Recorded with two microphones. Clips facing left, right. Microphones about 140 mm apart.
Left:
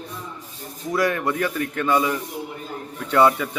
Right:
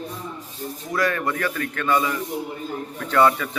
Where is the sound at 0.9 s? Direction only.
15° left (ahead or behind).